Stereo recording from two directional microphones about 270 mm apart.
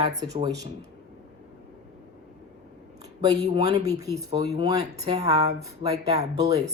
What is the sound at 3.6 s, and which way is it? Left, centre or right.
Speech, centre.